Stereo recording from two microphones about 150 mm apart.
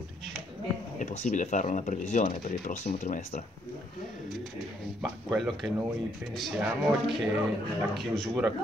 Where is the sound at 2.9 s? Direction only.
50° left (ahead or behind).